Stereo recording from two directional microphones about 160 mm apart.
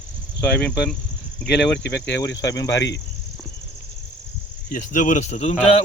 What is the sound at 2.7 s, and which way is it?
Cricket, 90° left.